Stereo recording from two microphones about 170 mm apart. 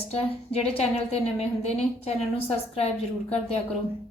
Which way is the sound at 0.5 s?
35° left (ahead or behind).